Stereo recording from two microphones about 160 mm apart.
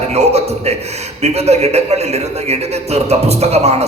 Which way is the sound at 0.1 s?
40° right (ahead or behind).